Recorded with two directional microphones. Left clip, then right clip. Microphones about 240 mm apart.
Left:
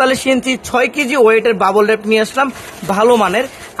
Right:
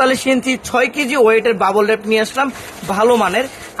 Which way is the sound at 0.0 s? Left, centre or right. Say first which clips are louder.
Left 1 dB; left.